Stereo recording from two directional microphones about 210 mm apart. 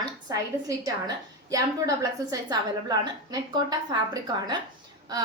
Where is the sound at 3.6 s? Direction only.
20° right (ahead or behind).